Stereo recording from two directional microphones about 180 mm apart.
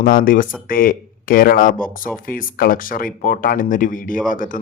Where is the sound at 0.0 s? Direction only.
50° left (ahead or behind).